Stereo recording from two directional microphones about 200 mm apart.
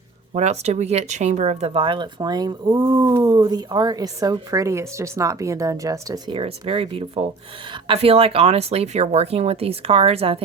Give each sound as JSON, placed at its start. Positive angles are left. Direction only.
{"t": 0.3, "sound": "speech", "side_deg": -35}